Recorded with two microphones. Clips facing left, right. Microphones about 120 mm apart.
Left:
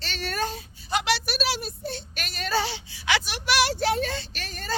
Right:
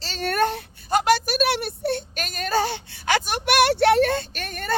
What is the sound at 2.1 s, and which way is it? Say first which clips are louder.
A woman's voice: right 4 dB; 45° right (ahead or behind).